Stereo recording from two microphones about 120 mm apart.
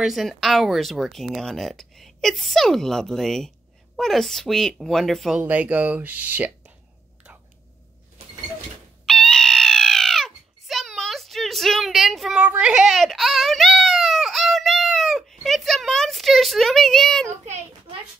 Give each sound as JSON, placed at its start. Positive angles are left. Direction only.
{"t": 0.0, "sound": "speech", "side_deg": 0}
{"t": 5.4, "sound": "speech", "side_deg": -10}
{"t": 9.0, "sound": "a sound", "side_deg": 0}
{"t": 17.5, "sound": "a child's voice", "side_deg": -50}